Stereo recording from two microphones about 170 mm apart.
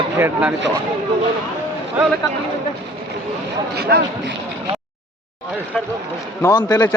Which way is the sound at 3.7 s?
70° right (ahead or behind).